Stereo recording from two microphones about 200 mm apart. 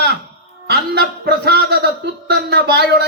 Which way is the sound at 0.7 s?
50° right (ahead or behind).